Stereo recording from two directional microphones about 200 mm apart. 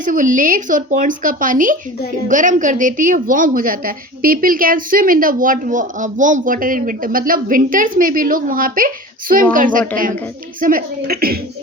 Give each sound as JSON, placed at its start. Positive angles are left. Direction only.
{"t": 0.0, "sound": "a woman's voice", "side_deg": -40}